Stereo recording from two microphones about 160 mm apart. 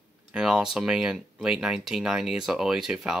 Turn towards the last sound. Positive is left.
turn(degrees=-5)  # may be behind; listen again after turning